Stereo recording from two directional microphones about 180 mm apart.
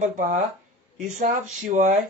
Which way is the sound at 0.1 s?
45° right (ahead or behind).